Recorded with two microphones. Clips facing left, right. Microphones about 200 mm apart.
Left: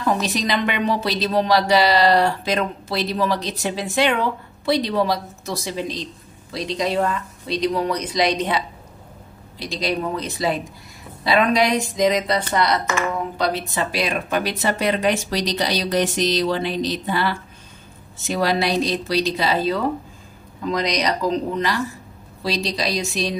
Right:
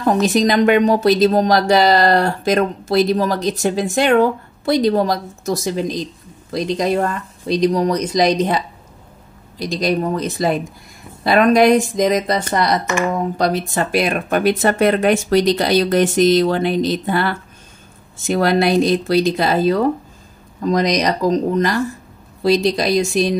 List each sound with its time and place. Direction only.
0.0 s a woman's voice: 50° right (ahead or behind)